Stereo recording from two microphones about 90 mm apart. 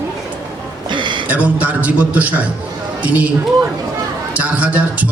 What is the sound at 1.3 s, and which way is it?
A man's voice, 15° right (ahead or behind).